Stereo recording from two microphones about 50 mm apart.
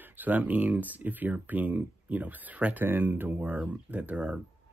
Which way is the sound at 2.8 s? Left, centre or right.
Right.